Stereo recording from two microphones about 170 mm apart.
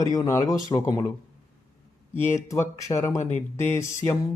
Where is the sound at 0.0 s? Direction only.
20° left (ahead or behind).